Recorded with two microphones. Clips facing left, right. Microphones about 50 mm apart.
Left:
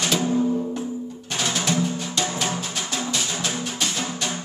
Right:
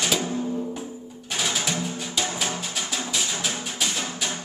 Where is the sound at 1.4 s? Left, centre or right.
Centre.